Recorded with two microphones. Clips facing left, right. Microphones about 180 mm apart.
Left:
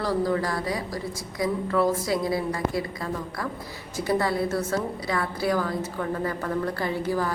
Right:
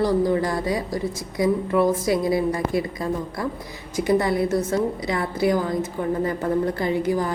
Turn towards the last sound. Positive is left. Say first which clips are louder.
# right 4 dB
turn(degrees=-15)  # may be behind; listen again after turning